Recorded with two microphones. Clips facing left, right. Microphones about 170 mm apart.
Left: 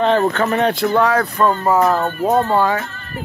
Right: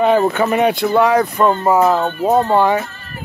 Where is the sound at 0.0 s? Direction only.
10° right (ahead or behind).